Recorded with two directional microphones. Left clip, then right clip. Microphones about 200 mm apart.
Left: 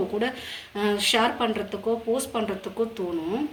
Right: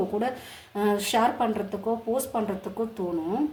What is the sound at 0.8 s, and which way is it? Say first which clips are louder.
Speech: left 1 dB; 35° right (ahead or behind).